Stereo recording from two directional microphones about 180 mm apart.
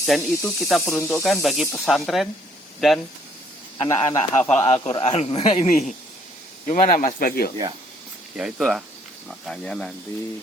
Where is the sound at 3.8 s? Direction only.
15° left (ahead or behind).